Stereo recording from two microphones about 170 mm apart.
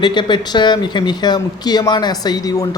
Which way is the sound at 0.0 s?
25° left (ahead or behind).